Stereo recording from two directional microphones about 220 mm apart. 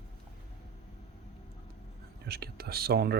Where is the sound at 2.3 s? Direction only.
45° right (ahead or behind).